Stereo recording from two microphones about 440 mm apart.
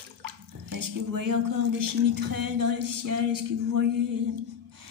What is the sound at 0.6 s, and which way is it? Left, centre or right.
Speech, right.